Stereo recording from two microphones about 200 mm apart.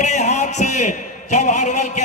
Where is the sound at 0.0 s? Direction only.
35° left (ahead or behind).